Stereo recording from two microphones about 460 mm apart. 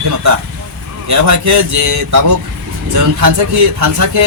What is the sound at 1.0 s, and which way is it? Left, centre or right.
A man's voice, right.